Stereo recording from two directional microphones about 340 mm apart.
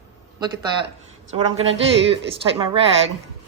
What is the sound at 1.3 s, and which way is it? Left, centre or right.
Speech, centre.